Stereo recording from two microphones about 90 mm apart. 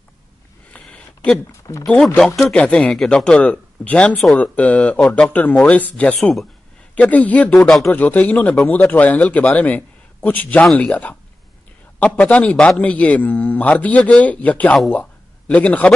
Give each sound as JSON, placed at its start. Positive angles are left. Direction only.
{"t": 0.7, "sound": "a sound", "side_deg": 10}
{"t": 1.5, "sound": "speech", "side_deg": 35}
{"t": 2.1, "sound": "a man's voice", "side_deg": 10}
{"t": 7.5, "sound": "speech", "side_deg": 5}
{"t": 7.8, "sound": "a man's voice", "side_deg": 20}